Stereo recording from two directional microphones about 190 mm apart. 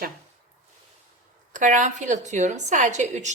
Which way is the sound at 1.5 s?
40° right (ahead or behind).